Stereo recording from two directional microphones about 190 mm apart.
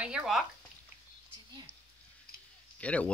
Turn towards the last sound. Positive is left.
turn(degrees=5)  # may be behind; listen again after turning